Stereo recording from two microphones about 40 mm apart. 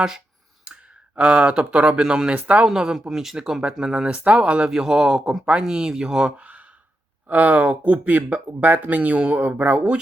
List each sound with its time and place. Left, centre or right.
1.2 s speech: right
2.0 s speech: right
2.3 s speech: right
2.6 s a man's voice: centre
4.7 s a man's voice: centre
6.3 s gasp: right
7.3 s speech: right
8.4 s speech: right
8.8 s speech: right